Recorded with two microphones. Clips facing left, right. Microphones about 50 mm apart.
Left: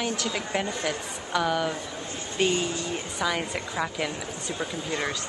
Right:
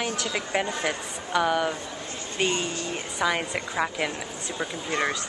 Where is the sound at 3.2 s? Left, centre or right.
Centre.